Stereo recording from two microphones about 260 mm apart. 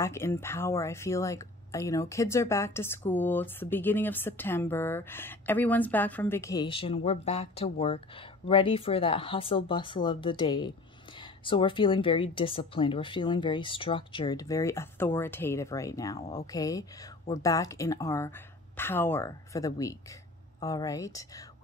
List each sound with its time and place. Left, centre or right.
0.0 s speech: centre